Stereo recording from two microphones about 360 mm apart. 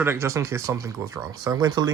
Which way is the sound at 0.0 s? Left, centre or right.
Centre.